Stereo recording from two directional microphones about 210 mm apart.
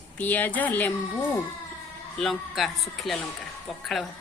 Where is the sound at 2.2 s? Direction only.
Centre (ahead or behind).